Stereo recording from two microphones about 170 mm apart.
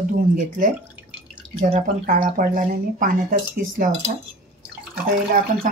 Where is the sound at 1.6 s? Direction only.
55° right (ahead or behind).